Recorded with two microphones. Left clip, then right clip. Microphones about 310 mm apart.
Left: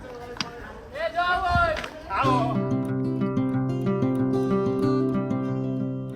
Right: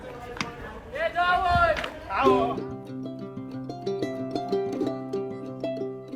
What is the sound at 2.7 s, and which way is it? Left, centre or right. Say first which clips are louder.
Music: left 9 dB; centre.